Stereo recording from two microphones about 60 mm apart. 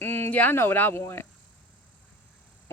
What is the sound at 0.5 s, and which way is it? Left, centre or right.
Speech, left.